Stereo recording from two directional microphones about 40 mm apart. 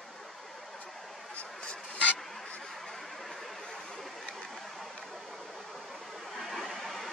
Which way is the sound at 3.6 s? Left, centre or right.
Centre.